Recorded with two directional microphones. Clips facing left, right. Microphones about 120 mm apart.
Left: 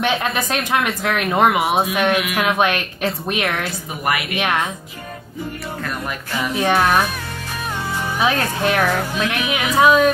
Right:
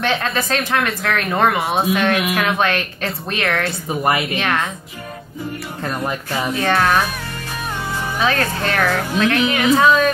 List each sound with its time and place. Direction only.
0.0 s speech: 15° left (ahead or behind)
1.6 s speech: centre (ahead or behind)
1.9 s speech: 15° left (ahead or behind)
4.0 s a woman's voice: 25° right (ahead or behind)
4.4 s speech: 15° left (ahead or behind)
6.5 s speech: 15° left (ahead or behind)
8.2 s speech: 15° left (ahead or behind)